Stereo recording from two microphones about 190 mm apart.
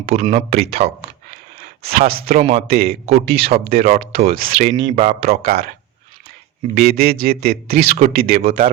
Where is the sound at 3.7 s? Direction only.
45° right (ahead or behind).